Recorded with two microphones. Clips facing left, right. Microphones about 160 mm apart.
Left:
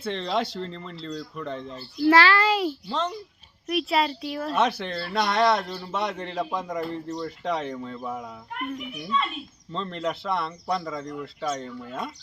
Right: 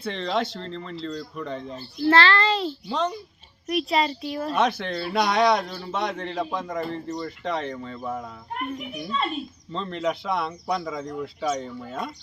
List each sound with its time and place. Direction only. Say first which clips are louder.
0.0 s speech: right 1 dB; centre (ahead or behind)
2.0 s a child's voice: left 1 dB; 10° left (ahead or behind)
8.5 s a child's voice: right 2 dB; 35° right (ahead or behind)
9.7 s speech: right 2 dB; centre (ahead or behind)